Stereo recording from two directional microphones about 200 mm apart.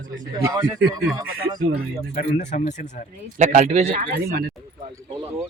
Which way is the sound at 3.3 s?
40° right (ahead or behind).